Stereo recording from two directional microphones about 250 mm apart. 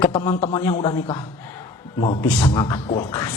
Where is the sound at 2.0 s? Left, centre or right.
Left.